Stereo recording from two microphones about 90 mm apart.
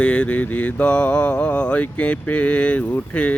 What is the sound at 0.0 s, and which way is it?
Speech, 15° left (ahead or behind).